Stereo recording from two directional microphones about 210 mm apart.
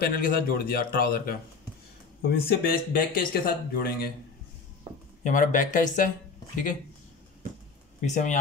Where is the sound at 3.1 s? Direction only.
45° left (ahead or behind).